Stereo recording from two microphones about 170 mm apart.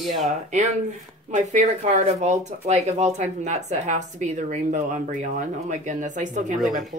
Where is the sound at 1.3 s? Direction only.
45° right (ahead or behind).